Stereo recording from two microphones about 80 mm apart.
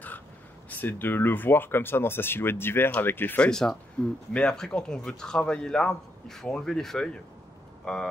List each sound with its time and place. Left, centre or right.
0.7 s speech: left
3.4 s speech: centre